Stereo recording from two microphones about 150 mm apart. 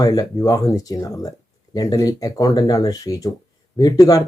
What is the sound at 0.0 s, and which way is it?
Speech, 25° left (ahead or behind).